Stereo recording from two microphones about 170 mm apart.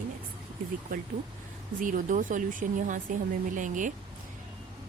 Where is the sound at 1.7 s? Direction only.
50° right (ahead or behind).